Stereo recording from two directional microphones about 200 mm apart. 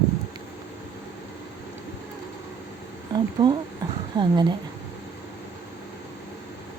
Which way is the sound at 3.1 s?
20° right (ahead or behind).